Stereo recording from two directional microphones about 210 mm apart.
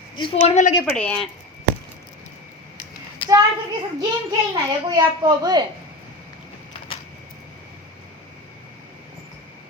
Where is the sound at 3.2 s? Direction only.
25° left (ahead or behind).